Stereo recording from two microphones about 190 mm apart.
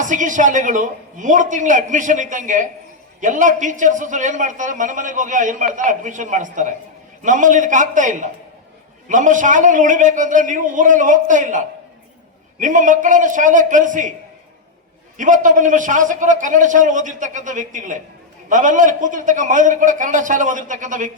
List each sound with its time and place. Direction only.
0.0 s a man's voice: 40° right (ahead or behind)
15.2 s a man's voice: 45° right (ahead or behind)